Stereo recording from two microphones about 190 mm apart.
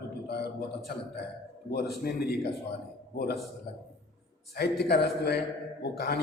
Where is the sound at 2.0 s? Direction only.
55° left (ahead or behind).